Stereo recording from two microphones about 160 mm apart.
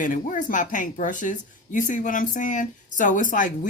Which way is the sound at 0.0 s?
55° left (ahead or behind).